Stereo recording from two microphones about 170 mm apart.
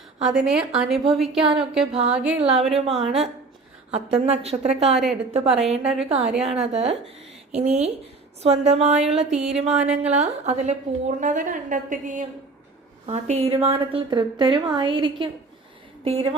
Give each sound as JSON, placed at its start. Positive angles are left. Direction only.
{"t": 0.2, "sound": "a woman's voice", "side_deg": -5}
{"t": 2.4, "sound": "a woman's voice", "side_deg": -35}
{"t": 4.3, "sound": "a woman's voice", "side_deg": -40}
{"t": 4.9, "sound": "a woman's voice", "side_deg": 0}
{"t": 6.1, "sound": "a woman's voice", "side_deg": -35}
{"t": 9.3, "sound": "a woman's voice", "side_deg": -5}
{"t": 9.6, "sound": "a woman's voice", "side_deg": -40}
{"t": 13.1, "sound": "a woman's voice", "side_deg": -40}